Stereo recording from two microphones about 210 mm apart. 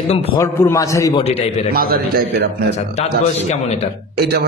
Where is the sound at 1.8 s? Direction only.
45° right (ahead or behind).